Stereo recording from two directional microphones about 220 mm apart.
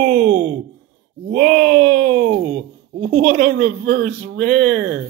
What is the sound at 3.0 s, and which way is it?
Speech, 45° right (ahead or behind).